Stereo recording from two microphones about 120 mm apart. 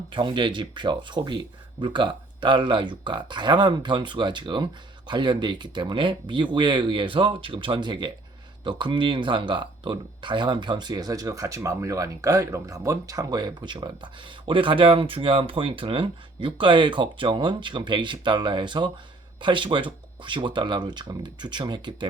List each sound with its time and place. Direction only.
0.1 s speech: 45° right (ahead or behind)